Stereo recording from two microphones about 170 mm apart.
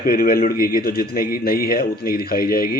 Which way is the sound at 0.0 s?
60° left (ahead or behind).